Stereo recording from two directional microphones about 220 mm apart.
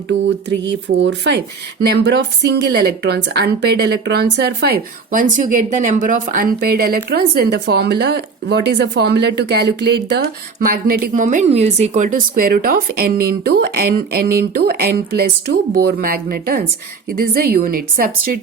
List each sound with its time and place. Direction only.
0.1 s a woman's voice: 50° right (ahead or behind)